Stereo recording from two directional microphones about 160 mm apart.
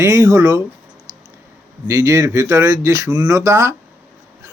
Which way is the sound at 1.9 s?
20° right (ahead or behind).